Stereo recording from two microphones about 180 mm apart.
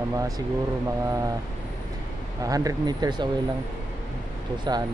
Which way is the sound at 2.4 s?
20° right (ahead or behind).